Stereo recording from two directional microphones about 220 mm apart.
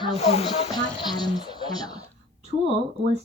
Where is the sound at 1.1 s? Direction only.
20° left (ahead or behind).